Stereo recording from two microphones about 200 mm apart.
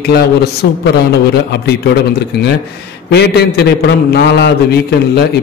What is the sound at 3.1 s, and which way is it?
A man's voice, 55° left (ahead or behind).